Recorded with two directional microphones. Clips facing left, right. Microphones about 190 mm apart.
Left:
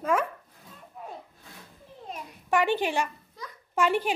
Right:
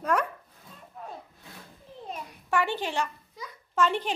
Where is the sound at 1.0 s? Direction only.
5° left (ahead or behind).